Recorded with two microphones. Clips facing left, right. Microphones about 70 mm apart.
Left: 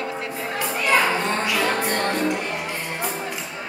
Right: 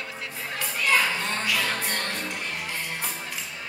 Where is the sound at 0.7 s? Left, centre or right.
Left.